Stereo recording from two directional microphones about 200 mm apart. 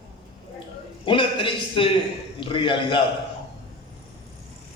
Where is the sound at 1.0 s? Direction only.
25° left (ahead or behind).